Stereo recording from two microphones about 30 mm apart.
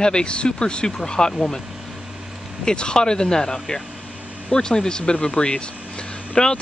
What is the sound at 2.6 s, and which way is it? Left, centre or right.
Speech, left.